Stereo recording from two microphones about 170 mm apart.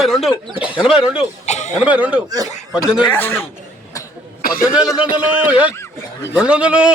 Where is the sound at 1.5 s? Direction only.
40° left (ahead or behind).